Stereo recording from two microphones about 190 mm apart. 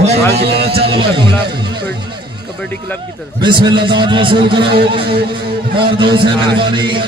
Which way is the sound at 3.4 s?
25° right (ahead or behind).